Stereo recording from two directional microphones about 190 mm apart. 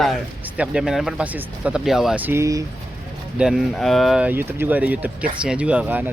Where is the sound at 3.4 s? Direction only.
Centre (ahead or behind).